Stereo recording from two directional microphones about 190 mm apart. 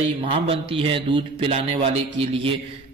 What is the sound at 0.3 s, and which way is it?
A man's voice, 30° right (ahead or behind).